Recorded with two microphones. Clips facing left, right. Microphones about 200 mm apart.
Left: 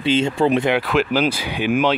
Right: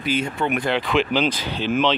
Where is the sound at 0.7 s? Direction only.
5° left (ahead or behind).